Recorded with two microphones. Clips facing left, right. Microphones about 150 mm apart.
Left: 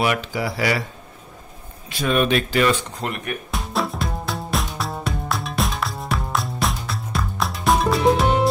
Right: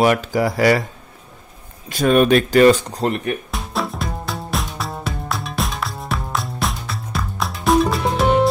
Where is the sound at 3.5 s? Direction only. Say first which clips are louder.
Even; centre (ahead or behind).